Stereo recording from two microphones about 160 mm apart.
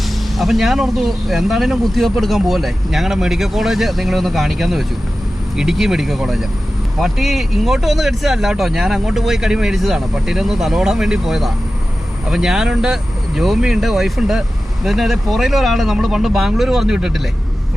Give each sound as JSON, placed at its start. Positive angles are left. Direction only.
{"t": 0.3, "sound": "speech", "side_deg": 0}